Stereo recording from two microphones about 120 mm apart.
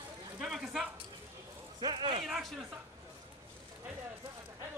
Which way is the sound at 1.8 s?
40° right (ahead or behind).